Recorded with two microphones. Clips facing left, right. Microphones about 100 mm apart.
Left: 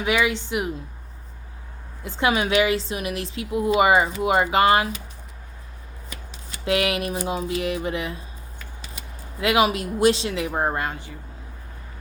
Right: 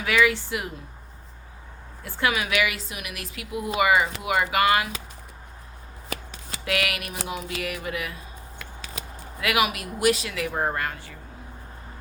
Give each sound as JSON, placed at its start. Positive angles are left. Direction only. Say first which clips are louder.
{"t": 0.0, "sound": "a woman's voice", "louder": "even", "side_deg": 20}
{"t": 2.0, "sound": "a woman's voice", "louder": "left 4 dB", "side_deg": 20}
{"t": 6.7, "sound": "a woman's voice", "louder": "left 6 dB", "side_deg": 25}
{"t": 9.4, "sound": "a woman's voice", "louder": "left 5 dB", "side_deg": 25}